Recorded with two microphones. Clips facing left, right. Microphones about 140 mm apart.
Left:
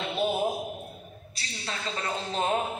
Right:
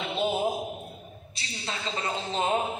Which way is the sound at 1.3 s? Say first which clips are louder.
Right 1 dB; 25° right (ahead or behind).